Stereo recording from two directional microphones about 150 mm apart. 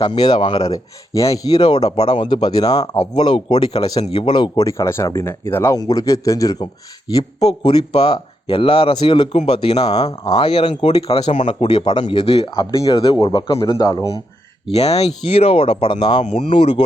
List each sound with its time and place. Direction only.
0.0 s speech: 30° left (ahead or behind)
4.6 s speech: 20° left (ahead or behind)
7.6 s speech: 40° left (ahead or behind)
9.8 s a man's voice: 25° left (ahead or behind); by 12.5 s 40° left (ahead or behind)
12.5 s speech: 25° left (ahead or behind)
13.0 s speech: 35° left (ahead or behind)
14.7 s speech: 45° left (ahead or behind)
16.2 s speech: 45° left (ahead or behind)